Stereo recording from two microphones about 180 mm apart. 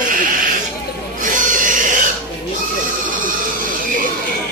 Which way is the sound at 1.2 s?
45° right (ahead or behind).